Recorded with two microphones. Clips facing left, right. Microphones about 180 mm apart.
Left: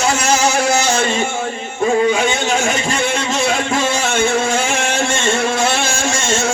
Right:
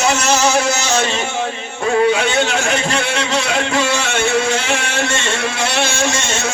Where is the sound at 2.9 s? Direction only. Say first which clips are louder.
Even; 45° left (ahead or behind).